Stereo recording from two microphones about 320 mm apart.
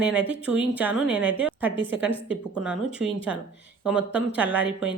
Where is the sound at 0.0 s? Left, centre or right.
Centre.